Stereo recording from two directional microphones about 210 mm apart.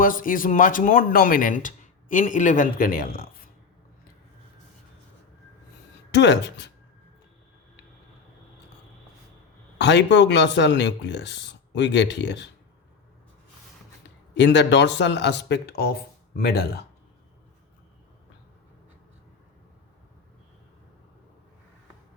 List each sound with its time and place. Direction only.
0.0 s speech: 40° left (ahead or behind)
6.1 s speech: 55° left (ahead or behind)
9.7 s speech: 55° left (ahead or behind)
14.3 s speech: 55° left (ahead or behind)